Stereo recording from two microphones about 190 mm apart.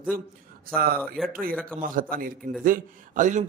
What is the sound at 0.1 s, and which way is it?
Speech, 50° right (ahead or behind).